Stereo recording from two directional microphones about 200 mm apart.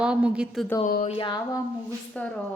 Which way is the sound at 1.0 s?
25° left (ahead or behind).